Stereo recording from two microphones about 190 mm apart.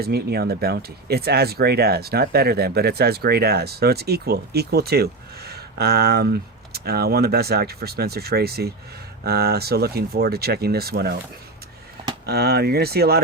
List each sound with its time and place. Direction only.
0.0 s speech: 55° right (ahead or behind)
12.2 s speech: 55° right (ahead or behind)